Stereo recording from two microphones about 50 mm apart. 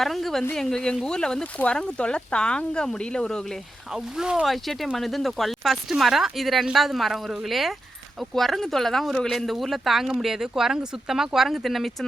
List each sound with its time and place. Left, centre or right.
0.0 s speech: centre
4.2 s speech: centre
4.4 s speech: centre